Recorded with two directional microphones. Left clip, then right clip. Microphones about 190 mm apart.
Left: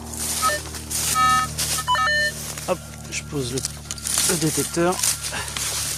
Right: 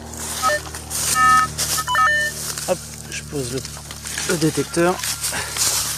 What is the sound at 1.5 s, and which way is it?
Telephone dialing, 30° right (ahead or behind).